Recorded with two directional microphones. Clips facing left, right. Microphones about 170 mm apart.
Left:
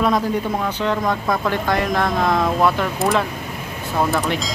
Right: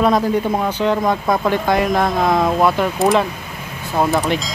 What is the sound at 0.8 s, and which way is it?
Speech, 20° right (ahead or behind).